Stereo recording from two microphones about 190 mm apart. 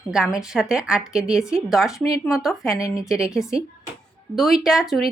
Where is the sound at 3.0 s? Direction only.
5° right (ahead or behind).